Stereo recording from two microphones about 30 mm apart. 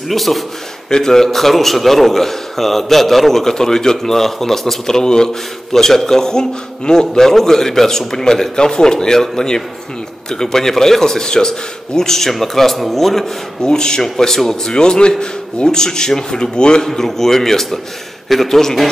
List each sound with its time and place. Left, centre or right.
0.1 s speech: centre
0.8 s a man's voice: centre
10.3 s a man's voice: centre
12.2 s a man's voice: centre
13.6 s a man's voice: left
14.1 s a man's voice: centre
14.8 s a man's voice: left
16.8 s a man's voice: centre